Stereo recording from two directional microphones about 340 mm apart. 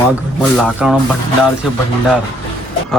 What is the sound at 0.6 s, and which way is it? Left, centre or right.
Speech, centre.